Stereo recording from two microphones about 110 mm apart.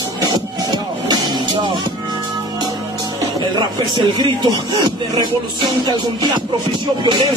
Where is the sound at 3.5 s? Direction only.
40° right (ahead or behind).